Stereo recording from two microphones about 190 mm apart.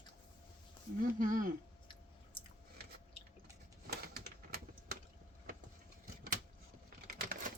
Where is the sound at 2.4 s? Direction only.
25° left (ahead or behind).